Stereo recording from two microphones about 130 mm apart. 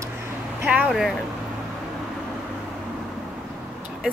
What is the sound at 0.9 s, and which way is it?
Speech, centre (ahead or behind).